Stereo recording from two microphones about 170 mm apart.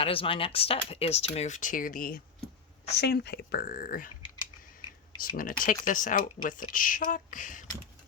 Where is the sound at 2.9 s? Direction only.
80° left; by 4.1 s 55° left (ahead or behind).